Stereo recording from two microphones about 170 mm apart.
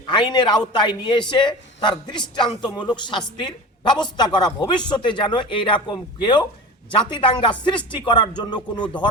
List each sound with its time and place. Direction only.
0.1 s a man's voice: 25° left (ahead or behind)